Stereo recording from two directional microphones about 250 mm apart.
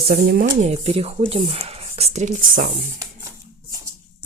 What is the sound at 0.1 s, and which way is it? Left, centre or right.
Speech, right.